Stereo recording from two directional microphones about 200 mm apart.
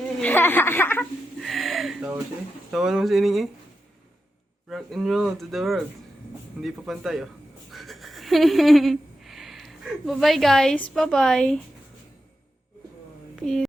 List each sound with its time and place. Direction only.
0.2 s a sound: 10° left (ahead or behind); by 2.2 s 10° right (ahead or behind)
2.7 s speech: centre (ahead or behind)
4.7 s speech: centre (ahead or behind)
13.3 s a woman's voice: centre (ahead or behind)